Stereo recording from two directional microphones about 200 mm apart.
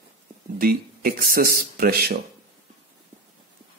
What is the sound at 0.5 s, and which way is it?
Speech, 45° right (ahead or behind).